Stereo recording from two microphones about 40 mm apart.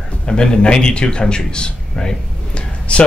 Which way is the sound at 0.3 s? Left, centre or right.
Centre.